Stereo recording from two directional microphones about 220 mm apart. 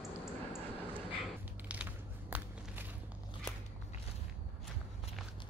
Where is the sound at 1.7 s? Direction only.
5° right (ahead or behind).